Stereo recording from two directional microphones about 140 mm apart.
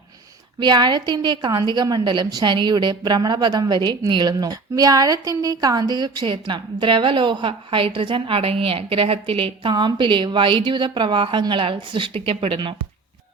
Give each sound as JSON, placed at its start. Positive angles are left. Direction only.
{"t": 0.6, "sound": "a woman's voice", "side_deg": -30}